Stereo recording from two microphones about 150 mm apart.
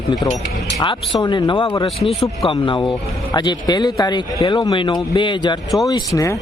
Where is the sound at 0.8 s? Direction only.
30° left (ahead or behind).